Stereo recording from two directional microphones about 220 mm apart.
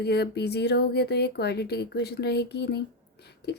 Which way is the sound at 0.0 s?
50° left (ahead or behind).